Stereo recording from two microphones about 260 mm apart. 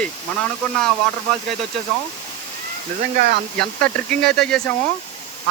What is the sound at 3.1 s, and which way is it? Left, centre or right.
Speech, right.